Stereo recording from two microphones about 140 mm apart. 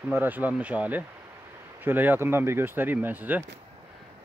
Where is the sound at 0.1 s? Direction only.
15° right (ahead or behind).